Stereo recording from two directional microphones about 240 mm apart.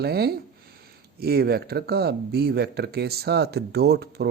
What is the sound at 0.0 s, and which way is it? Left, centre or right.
A man's voice, right.